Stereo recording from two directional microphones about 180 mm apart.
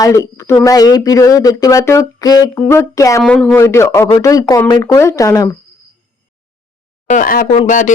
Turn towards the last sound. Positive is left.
turn(degrees=45)  # may be behind; listen again after turning